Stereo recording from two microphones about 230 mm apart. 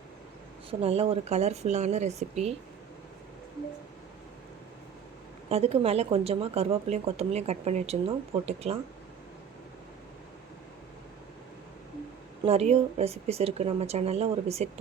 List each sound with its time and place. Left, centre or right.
0.7 s speech: right
5.5 s speech: right
12.5 s speech: right